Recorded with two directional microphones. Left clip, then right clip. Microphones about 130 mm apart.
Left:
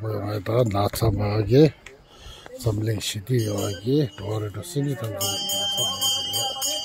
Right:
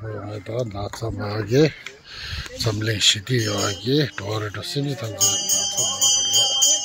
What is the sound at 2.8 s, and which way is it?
Speech, 15° left (ahead or behind).